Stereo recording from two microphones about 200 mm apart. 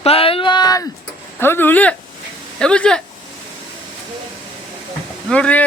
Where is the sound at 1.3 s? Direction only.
10° left (ahead or behind).